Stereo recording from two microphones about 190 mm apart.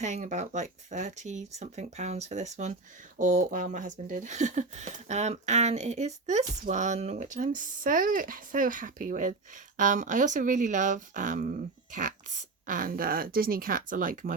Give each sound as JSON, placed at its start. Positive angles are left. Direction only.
{"t": 0.0, "sound": "speech", "side_deg": -40}